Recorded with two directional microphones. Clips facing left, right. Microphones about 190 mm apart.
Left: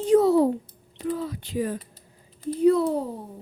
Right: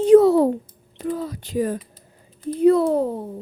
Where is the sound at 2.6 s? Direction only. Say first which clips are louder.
Right 4 dB; 60° right (ahead or behind).